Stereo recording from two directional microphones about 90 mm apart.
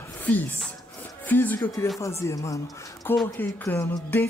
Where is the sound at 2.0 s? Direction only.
35° left (ahead or behind).